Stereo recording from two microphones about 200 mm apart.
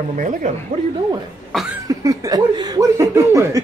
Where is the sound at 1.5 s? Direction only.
5° right (ahead or behind).